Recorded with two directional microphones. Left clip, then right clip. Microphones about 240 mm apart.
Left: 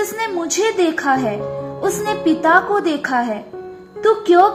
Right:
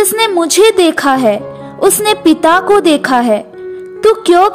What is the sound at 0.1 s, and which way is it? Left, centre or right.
Speech, right.